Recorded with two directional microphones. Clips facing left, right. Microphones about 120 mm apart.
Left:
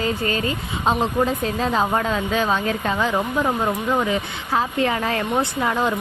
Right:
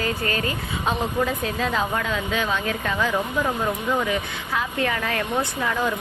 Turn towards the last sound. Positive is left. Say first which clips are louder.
# left 3 dB
turn(degrees=30)  # may be behind; listen again after turning